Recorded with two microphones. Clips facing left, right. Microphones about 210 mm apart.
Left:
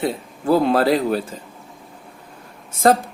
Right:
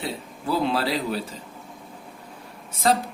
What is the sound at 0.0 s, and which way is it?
Speech, 50° left (ahead or behind).